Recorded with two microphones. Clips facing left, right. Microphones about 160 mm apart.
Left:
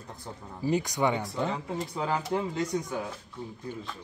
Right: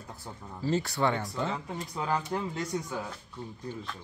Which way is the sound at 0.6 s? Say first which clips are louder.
Left 1 dB; 15° left (ahead or behind).